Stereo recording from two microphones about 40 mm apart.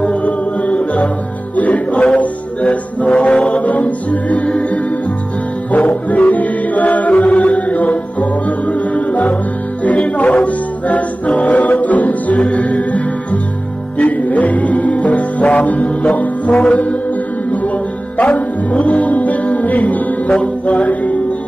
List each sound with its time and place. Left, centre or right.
0.1 s music: left
3.1 s music: left
18.1 s music: left